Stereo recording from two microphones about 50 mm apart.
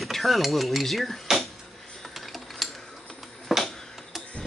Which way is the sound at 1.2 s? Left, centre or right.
Centre.